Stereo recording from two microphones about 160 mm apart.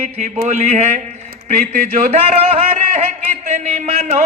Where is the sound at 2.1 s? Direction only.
40° right (ahead or behind).